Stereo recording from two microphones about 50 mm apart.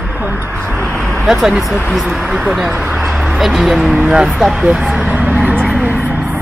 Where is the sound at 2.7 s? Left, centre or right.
Right.